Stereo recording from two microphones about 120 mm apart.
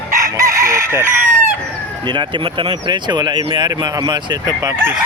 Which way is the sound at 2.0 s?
40° right (ahead or behind).